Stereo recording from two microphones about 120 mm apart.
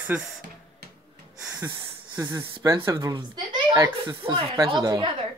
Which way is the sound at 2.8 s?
30° right (ahead or behind).